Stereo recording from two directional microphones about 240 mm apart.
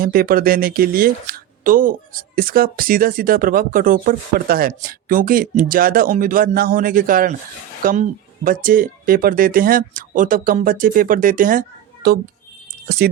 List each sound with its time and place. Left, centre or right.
0.0 s speech: right